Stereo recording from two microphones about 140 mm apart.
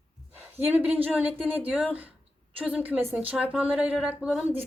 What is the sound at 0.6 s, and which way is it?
A woman's voice, 10° right (ahead or behind).